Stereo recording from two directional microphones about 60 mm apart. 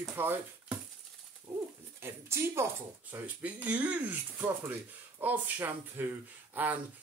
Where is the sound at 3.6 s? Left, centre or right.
Right.